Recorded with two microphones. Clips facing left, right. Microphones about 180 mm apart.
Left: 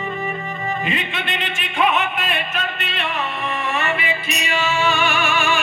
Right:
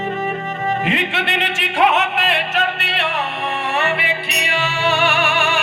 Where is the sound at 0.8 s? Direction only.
70° right (ahead or behind).